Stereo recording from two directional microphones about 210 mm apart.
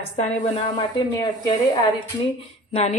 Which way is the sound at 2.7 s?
30° left (ahead or behind).